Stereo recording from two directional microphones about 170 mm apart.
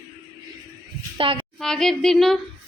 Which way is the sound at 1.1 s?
30° right (ahead or behind).